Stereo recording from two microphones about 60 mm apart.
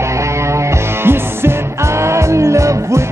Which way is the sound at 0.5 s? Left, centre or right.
Right.